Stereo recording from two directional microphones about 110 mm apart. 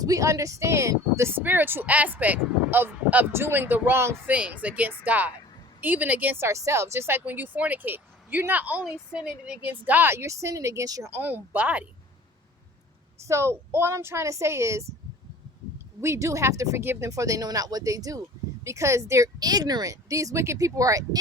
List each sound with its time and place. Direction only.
0.0 s speech: 30° right (ahead or behind)
11.1 s speech: 15° right (ahead or behind)
13.2 s speech: 25° right (ahead or behind)
16.0 s speech: 25° right (ahead or behind)